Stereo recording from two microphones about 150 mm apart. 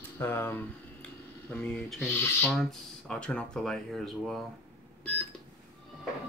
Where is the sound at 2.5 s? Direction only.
Centre (ahead or behind).